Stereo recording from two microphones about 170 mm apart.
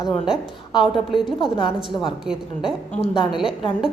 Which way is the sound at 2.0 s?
5° right (ahead or behind).